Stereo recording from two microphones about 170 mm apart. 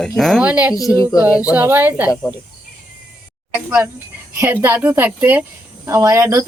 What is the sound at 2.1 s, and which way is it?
Speech, 15° left (ahead or behind).